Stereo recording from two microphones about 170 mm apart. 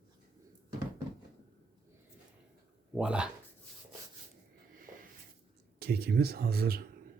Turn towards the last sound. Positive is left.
turn(degrees=-65)  # may be behind; listen again after turning